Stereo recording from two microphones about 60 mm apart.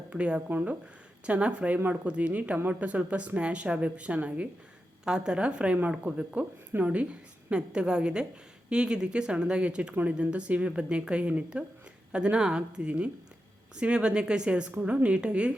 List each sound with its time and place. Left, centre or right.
0.1 s a woman's voice: centre